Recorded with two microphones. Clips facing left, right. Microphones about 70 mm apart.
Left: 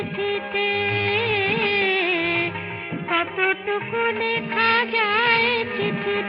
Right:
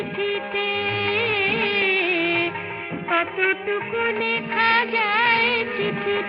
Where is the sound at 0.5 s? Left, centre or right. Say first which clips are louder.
Left 1 dB; left.